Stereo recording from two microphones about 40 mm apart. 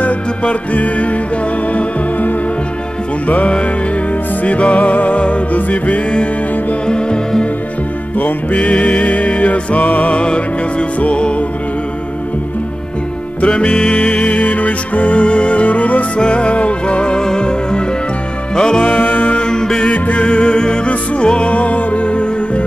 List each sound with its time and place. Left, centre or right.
0.0 s music: left
3.3 s music: left
6.9 s music: left
8.5 s music: left
13.4 s music: left
16.2 s music: left
18.9 s music: left
19.3 s mantra: left
20.2 s music: left